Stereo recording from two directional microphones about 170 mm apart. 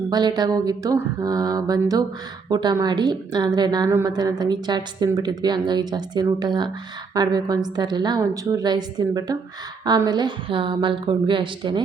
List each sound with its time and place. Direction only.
0.1 s a woman's voice: 25° right (ahead or behind)